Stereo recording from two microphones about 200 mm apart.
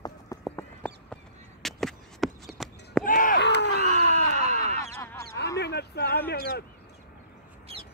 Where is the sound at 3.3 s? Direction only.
60° left (ahead or behind).